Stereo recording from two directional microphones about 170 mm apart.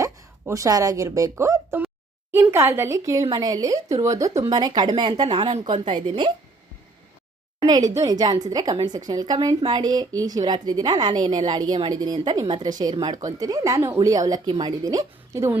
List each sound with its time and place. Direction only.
0.0 s a woman's voice: 20° right (ahead or behind)
7.6 s a woman's voice: 20° right (ahead or behind)